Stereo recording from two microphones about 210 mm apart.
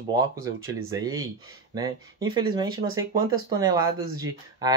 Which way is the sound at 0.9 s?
20° right (ahead or behind).